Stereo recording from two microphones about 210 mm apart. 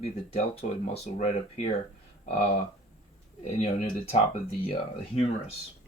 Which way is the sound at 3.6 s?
30° left (ahead or behind).